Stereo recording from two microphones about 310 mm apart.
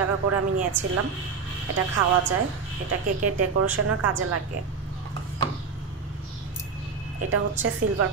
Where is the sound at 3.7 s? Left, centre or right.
Right.